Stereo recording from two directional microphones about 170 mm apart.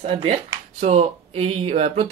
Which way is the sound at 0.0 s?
35° right (ahead or behind).